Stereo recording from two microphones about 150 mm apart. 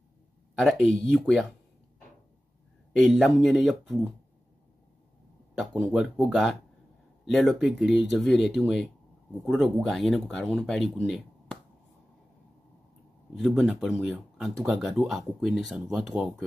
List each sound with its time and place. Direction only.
0.6 s speech: centre (ahead or behind)
2.9 s speech: centre (ahead or behind)
5.5 s speech: centre (ahead or behind)
13.4 s speech: centre (ahead or behind)